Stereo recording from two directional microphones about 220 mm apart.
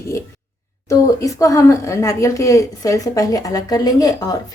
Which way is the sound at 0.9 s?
15° left (ahead or behind).